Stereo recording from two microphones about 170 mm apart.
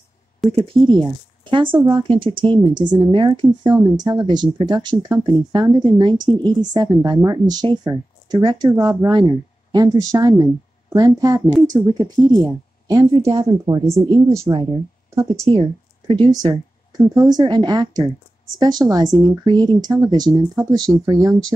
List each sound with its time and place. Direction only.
0.5 s speech: 30° right (ahead or behind)
15.6 s speech: 30° right (ahead or behind)